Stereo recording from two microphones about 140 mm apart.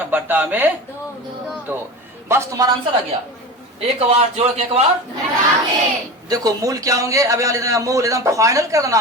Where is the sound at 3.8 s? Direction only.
45° right (ahead or behind).